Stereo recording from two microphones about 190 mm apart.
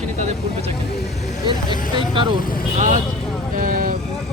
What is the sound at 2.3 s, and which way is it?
Speech, 50° left (ahead or behind).